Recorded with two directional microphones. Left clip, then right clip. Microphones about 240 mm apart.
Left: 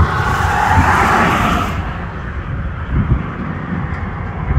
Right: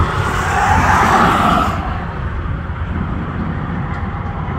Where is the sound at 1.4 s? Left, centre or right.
Left.